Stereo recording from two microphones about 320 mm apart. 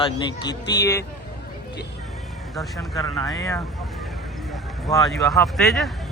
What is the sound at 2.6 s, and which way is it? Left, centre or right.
Speech, centre.